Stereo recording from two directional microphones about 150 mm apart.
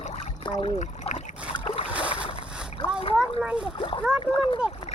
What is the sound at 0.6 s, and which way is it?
Trickle, 45° left (ahead or behind).